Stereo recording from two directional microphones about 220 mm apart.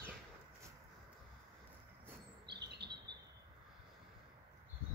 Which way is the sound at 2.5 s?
50° right (ahead or behind).